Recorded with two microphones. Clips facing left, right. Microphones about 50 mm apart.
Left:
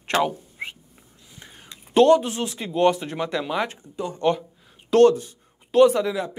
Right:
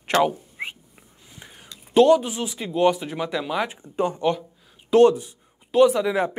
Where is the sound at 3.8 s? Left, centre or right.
Right.